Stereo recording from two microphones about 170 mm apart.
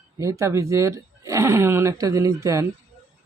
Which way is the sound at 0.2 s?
20° right (ahead or behind).